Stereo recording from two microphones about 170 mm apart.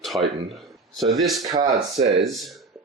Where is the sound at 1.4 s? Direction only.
25° right (ahead or behind).